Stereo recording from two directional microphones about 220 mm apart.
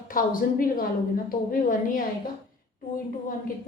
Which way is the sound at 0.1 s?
40° left (ahead or behind).